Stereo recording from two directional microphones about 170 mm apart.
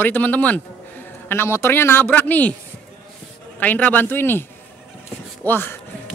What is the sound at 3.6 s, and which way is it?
Speech, 10° left (ahead or behind).